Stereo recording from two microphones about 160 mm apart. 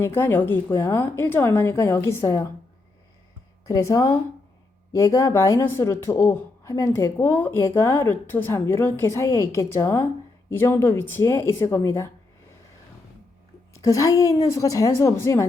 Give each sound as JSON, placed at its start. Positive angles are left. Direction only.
{"t": 0.0, "sound": "speech", "side_deg": 15}
{"t": 3.7, "sound": "a woman's voice", "side_deg": 20}
{"t": 13.8, "sound": "a woman's voice", "side_deg": 20}